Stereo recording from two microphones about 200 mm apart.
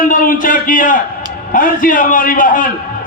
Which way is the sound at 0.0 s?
45° left (ahead or behind).